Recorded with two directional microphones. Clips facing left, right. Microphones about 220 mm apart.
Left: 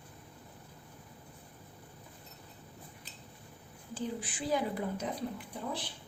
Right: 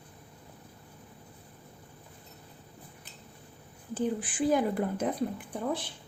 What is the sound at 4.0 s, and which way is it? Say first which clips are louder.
A woman's voice: right 8 dB; 50° right (ahead or behind).